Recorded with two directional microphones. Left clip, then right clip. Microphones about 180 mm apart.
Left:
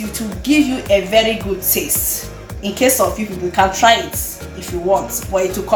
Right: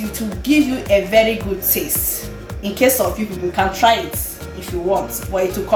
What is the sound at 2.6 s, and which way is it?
A woman's voice, 5° left (ahead or behind).